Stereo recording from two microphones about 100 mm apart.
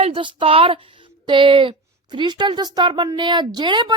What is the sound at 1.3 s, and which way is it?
Speech, 55° right (ahead or behind).